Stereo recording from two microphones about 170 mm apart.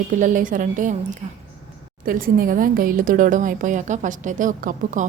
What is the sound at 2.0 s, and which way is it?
A woman's voice, 55° right (ahead or behind).